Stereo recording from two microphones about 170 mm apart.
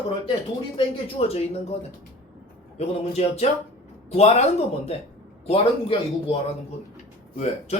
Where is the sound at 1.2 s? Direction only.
35° left (ahead or behind).